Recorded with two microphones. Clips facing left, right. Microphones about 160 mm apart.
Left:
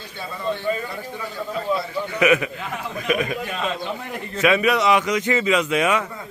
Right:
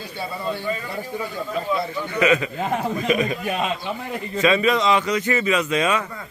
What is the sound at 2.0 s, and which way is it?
Speech, 15° left (ahead or behind).